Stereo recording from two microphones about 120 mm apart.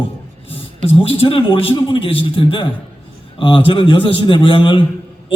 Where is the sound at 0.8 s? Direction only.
50° left (ahead or behind).